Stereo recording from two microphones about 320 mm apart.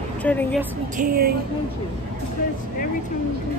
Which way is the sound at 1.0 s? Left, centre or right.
Right.